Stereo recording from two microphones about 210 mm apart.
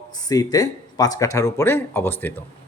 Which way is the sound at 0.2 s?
20° left (ahead or behind).